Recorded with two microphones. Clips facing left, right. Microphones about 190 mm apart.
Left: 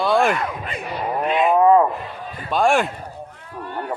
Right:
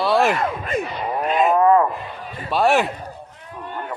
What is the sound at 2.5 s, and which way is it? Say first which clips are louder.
Speech: even; 5° right (ahead or behind).